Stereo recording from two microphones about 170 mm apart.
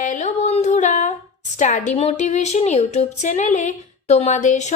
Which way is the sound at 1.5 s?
45° left (ahead or behind).